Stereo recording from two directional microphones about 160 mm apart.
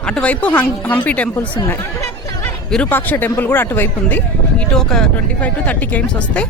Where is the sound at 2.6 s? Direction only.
5° left (ahead or behind).